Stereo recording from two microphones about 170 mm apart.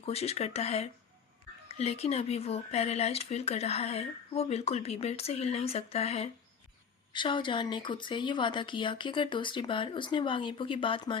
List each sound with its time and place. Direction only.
0.0 s speech: 35° left (ahead or behind)